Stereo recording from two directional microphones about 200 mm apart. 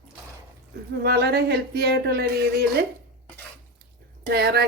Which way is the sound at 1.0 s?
50° right (ahead or behind).